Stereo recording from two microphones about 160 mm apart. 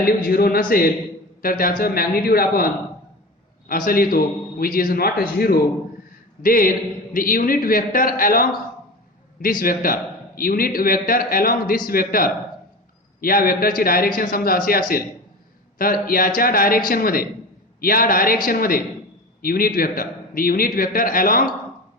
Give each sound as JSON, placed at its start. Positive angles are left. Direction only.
{"t": 0.0, "sound": "a man's voice", "side_deg": 70}
{"t": 3.7, "sound": "a man's voice", "side_deg": 65}